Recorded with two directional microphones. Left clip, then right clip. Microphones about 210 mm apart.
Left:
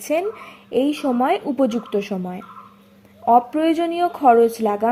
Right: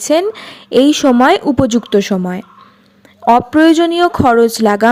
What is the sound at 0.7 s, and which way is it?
A woman's voice, 30° right (ahead or behind).